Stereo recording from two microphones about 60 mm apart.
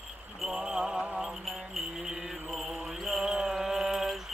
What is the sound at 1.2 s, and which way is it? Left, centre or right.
Mantra, centre.